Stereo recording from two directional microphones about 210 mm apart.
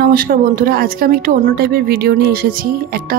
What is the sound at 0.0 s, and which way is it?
Speech, 45° right (ahead or behind).